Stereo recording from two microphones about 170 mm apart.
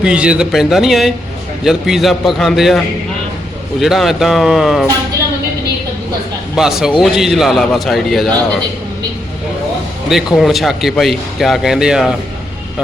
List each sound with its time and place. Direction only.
0.0 s a man's voice: 5° right (ahead or behind)
6.6 s a man's voice: 5° right (ahead or behind)
10.3 s a man's voice: centre (ahead or behind)